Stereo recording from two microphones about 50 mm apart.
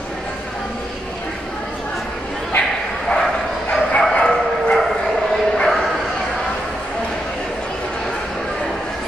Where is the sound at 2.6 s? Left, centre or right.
Centre.